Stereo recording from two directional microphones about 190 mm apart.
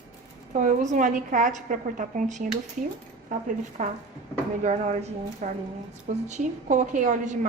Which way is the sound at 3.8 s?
40° right (ahead or behind).